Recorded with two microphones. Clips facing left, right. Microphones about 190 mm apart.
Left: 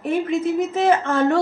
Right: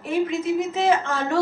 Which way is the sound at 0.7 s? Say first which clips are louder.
Left 4 dB; 55° left (ahead or behind).